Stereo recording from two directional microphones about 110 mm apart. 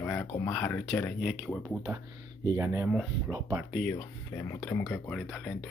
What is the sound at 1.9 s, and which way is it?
Speech, 20° right (ahead or behind).